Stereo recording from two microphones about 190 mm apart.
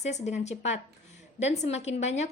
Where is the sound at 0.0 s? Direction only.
35° left (ahead or behind).